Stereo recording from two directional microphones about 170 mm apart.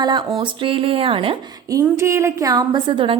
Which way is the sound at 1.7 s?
20° right (ahead or behind).